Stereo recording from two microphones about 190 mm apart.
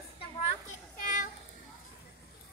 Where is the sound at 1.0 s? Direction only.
45° left (ahead or behind).